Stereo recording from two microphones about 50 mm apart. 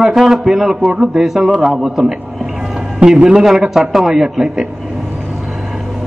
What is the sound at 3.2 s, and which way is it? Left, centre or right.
Speech, centre.